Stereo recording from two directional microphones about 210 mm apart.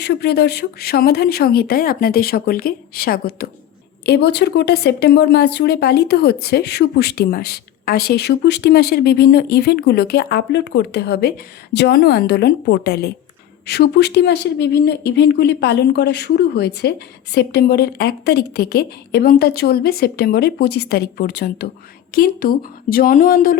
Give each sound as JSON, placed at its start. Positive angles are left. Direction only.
{"t": 0.0, "sound": "speech", "side_deg": 50}